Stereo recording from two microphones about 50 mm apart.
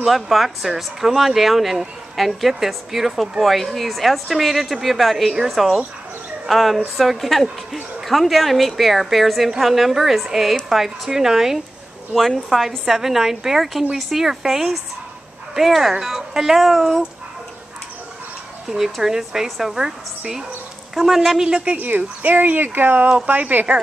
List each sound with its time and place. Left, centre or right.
0.0 s a woman's voice: centre
18.9 s a woman's voice: centre
21.7 s speech: right